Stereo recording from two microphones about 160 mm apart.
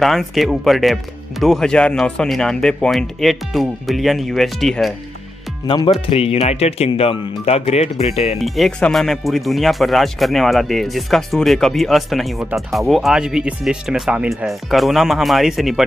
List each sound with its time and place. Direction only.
0.0 s speech: centre (ahead or behind)
5.7 s speech: 30° left (ahead or behind)
8.4 s speech: centre (ahead or behind)